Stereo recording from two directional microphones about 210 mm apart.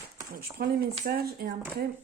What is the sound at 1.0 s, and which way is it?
Speech, 50° right (ahead or behind).